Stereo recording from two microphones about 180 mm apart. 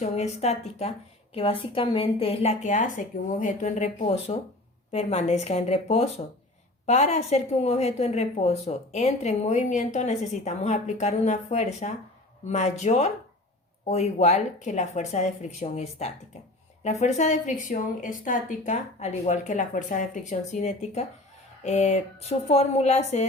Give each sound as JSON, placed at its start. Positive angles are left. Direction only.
{"t": 0.0, "sound": "a woman's voice", "side_deg": 35}